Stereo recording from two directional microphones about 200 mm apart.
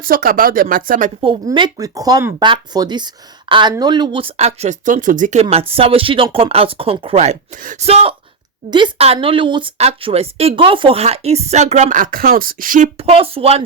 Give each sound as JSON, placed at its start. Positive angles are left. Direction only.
{"t": 0.0, "sound": "speech", "side_deg": -45}
{"t": 1.2, "sound": "speech", "side_deg": -25}